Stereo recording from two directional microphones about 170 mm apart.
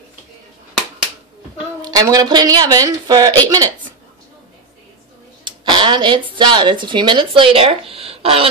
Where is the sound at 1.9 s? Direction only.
20° right (ahead or behind).